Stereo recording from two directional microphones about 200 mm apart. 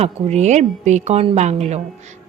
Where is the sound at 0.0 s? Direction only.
35° right (ahead or behind).